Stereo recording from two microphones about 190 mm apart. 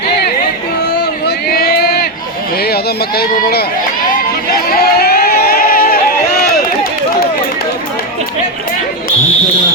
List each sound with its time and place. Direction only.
1.5 s a sound: 55° left (ahead or behind)
2.6 s speech: 55° left (ahead or behind)
4.5 s crowd: 55° left (ahead or behind)